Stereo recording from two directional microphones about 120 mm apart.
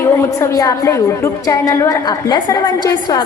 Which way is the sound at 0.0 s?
20° left (ahead or behind).